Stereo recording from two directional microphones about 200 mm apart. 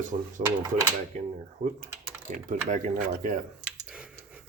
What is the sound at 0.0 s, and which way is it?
Speech, 40° right (ahead or behind).